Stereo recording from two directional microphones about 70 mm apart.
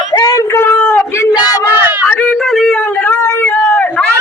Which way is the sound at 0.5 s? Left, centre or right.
Left.